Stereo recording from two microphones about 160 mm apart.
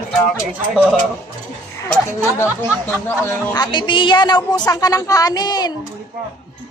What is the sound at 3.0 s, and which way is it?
Speech, 15° left (ahead or behind).